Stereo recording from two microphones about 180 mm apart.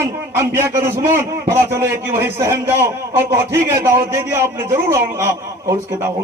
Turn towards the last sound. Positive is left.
turn(degrees=-15)  # may be behind; listen again after turning